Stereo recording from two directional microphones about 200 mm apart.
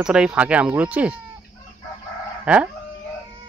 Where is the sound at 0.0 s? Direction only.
5° right (ahead or behind).